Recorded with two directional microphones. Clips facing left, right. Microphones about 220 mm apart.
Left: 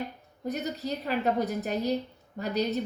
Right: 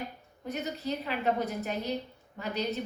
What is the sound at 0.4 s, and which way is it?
A woman's voice, 40° left (ahead or behind).